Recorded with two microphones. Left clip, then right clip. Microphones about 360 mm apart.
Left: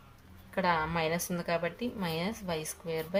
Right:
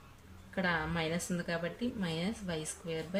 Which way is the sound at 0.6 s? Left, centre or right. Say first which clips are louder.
Left 5 dB; centre.